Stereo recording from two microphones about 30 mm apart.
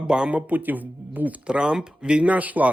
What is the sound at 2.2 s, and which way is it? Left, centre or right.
Speech, right.